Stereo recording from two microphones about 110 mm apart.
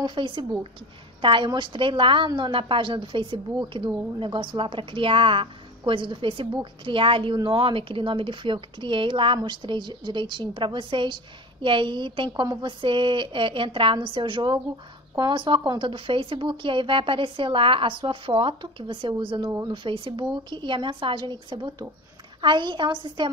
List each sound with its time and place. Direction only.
0.0 s a woman's voice: 45° right (ahead or behind)